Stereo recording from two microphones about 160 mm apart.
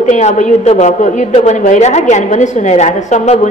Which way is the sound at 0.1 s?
50° left (ahead or behind).